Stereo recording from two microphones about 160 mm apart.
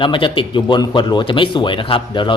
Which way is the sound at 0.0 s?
30° left (ahead or behind).